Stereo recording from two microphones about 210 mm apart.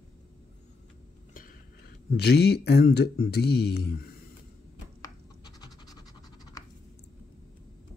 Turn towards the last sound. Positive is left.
turn(degrees=20)  # may be behind; listen again after turning